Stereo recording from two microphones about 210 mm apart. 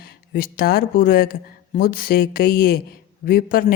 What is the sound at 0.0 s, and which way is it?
Speech, 45° left (ahead or behind).